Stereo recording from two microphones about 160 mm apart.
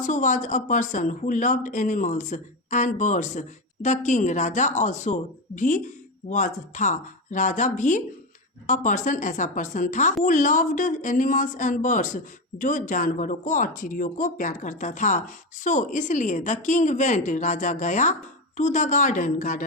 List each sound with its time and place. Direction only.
0.0 s speech: 50° left (ahead or behind)